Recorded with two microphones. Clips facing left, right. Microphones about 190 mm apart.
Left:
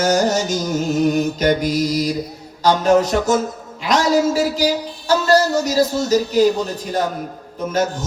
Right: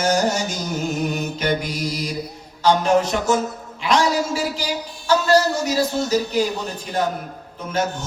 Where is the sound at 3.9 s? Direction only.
40° left (ahead or behind).